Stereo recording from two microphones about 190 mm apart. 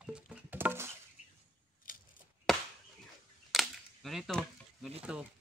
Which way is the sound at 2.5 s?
Centre (ahead or behind).